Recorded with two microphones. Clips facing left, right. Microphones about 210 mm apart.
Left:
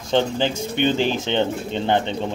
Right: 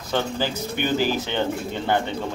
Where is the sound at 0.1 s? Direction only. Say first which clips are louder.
Left 5 dB; 25° left (ahead or behind).